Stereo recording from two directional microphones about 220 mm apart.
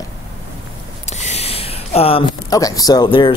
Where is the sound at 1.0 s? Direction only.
30° left (ahead or behind).